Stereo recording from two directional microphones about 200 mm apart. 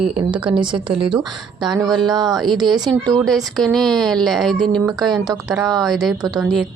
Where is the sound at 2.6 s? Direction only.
20° right (ahead or behind).